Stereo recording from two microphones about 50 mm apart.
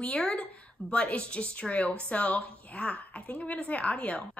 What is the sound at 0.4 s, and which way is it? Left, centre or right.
A woman's voice, left.